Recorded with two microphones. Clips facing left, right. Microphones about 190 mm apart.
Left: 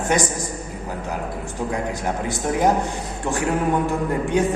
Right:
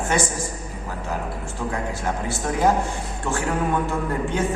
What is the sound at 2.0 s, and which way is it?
Speech, 15° left (ahead or behind).